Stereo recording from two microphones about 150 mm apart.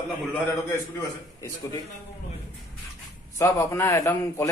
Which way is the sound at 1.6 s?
25° left (ahead or behind).